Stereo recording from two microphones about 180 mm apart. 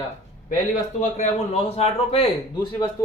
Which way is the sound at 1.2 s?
35° left (ahead or behind).